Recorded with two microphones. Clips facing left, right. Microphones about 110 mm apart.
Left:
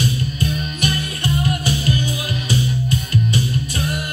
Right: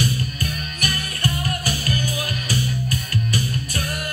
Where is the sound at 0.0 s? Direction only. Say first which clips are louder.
Left 3 dB; 20° left (ahead or behind).